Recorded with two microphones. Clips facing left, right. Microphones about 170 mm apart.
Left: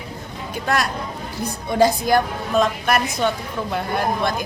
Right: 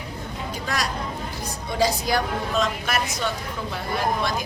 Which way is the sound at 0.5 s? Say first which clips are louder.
Left 7 dB; 55° left (ahead or behind).